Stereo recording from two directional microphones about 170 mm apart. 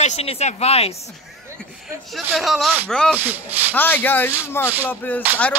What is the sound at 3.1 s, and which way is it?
Speech, 10° right (ahead or behind).